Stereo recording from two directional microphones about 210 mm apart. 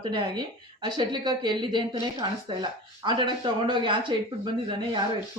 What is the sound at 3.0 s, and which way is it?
Speech, 20° right (ahead or behind).